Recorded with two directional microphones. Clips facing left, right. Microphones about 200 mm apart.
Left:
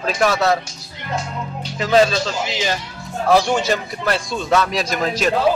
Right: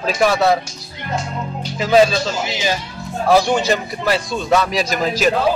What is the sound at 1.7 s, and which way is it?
A man's voice, 5° right (ahead or behind).